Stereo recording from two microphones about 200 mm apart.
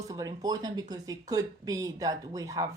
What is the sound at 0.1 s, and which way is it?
Speech, 20° right (ahead or behind).